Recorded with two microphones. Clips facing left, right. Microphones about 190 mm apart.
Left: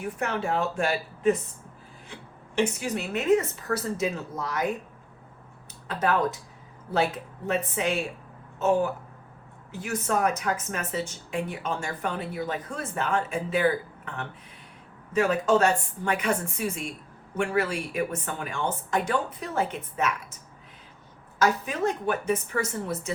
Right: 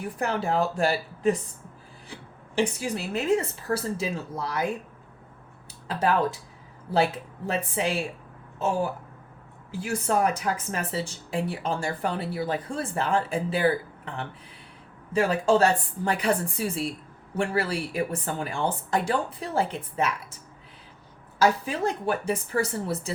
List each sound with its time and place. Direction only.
0.0 s speech: 35° right (ahead or behind)
2.6 s speech: 30° right (ahead or behind)
7.4 s speech: 30° right (ahead or behind)
8.5 s a sound: 30° right (ahead or behind)
9.7 s speech: 30° right (ahead or behind)
21.3 s speech: 30° right (ahead or behind)